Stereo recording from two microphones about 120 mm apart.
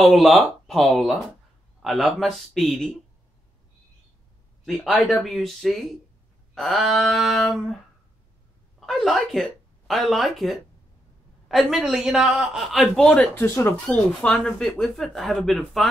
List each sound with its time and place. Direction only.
0.0 s a man's voice: centre (ahead or behind)
4.6 s a man's voice: centre (ahead or behind)
8.7 s a man's voice: centre (ahead or behind)
13.4 s speech: 25° left (ahead or behind)
13.8 s a man's voice: 5° left (ahead or behind)